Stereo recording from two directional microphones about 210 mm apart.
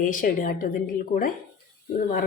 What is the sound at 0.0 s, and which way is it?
A woman's voice, 40° left (ahead or behind).